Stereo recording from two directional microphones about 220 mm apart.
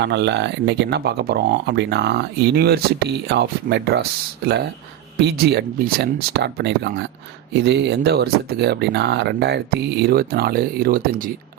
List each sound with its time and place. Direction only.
0.0 s speech: 50° right (ahead or behind)